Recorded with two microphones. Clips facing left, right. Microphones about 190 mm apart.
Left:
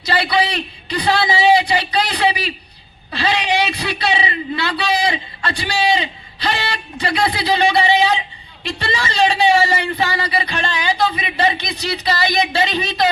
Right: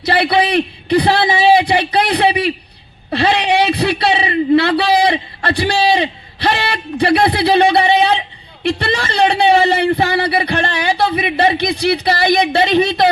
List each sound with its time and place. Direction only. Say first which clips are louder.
0.0 s a man's voice: right 4 dB; 60° right (ahead or behind)
3.1 s a sound: right 5 dB; 60° right (ahead or behind)
8.6 s a man's voice: right 6 dB; 60° right (ahead or behind)